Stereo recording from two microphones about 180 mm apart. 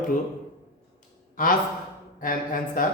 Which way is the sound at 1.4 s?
50° left (ahead or behind).